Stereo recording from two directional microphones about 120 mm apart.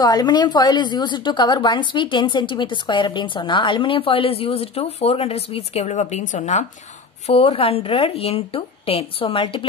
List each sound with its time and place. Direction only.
0.0 s a woman's voice: 35° left (ahead or behind); by 6.6 s 85° left
7.2 s speech: 55° left (ahead or behind)